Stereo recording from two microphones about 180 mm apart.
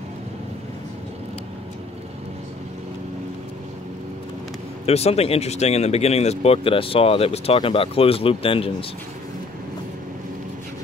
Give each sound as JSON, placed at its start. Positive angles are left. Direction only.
{"t": 4.8, "sound": "speech", "side_deg": 35}